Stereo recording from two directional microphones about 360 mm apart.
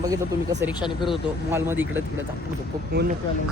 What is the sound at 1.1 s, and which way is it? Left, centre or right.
Speech, centre.